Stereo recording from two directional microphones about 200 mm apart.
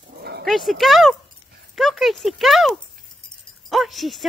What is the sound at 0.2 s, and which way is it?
Dog, 55° right (ahead or behind).